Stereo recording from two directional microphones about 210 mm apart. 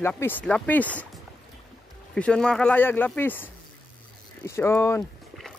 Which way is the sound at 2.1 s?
5° left (ahead or behind).